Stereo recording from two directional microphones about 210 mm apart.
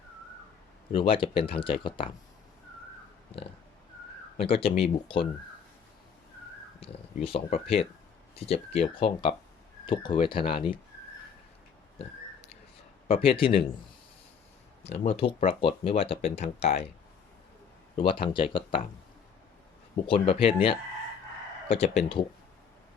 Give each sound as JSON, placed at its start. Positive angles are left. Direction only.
{"t": 0.9, "sound": "speech", "side_deg": 25}
{"t": 4.4, "sound": "speech", "side_deg": 25}
{"t": 6.7, "sound": "speech", "side_deg": 25}
{"t": 13.1, "sound": "speech", "side_deg": 25}
{"t": 14.8, "sound": "speech", "side_deg": 30}
{"t": 17.9, "sound": "speech", "side_deg": 25}
{"t": 20.1, "sound": "speech", "side_deg": 25}